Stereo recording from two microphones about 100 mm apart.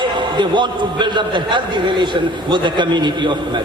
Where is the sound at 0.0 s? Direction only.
50° right (ahead or behind).